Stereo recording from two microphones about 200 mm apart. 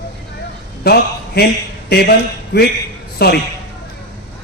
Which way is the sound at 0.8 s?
50° left (ahead or behind).